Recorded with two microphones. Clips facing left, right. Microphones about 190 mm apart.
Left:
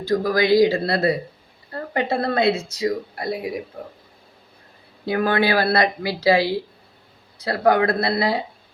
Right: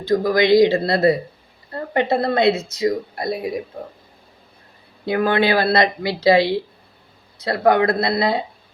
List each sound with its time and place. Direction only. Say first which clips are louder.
0.0 s speech: right 3 dB; 20° right (ahead or behind)
5.0 s speech: right 2 dB; 20° right (ahead or behind)
7.6 s speech: right 2 dB; 20° right (ahead or behind)